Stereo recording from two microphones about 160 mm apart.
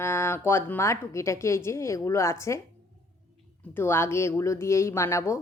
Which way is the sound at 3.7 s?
15° left (ahead or behind).